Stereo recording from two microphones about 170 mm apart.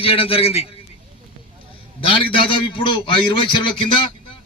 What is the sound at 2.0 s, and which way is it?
A man's voice, 30° left (ahead or behind).